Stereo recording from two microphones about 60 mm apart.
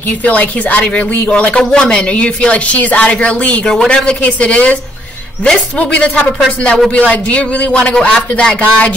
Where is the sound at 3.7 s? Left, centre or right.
Centre.